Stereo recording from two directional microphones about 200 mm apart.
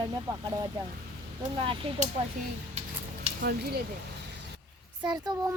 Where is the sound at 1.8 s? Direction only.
30° right (ahead or behind).